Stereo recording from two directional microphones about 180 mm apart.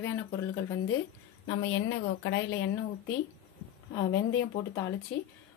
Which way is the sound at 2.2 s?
80° left.